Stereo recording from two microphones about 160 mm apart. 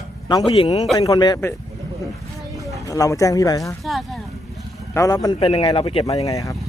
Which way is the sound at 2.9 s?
20° left (ahead or behind).